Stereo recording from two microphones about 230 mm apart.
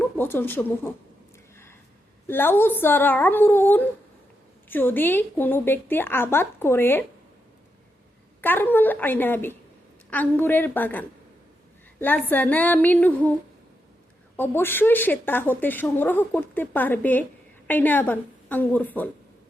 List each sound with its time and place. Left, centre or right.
0.0 s speech: centre
2.2 s a woman's voice: centre
8.4 s a woman's voice: centre
14.3 s a woman's voice: centre